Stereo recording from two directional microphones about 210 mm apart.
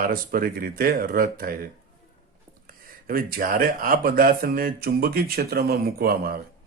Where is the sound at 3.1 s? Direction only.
45° right (ahead or behind).